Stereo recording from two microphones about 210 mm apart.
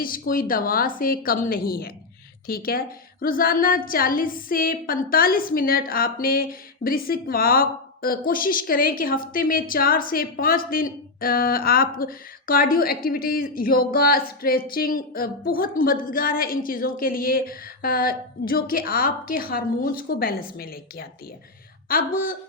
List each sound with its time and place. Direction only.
0.0 s a woman's voice: 40° left (ahead or behind)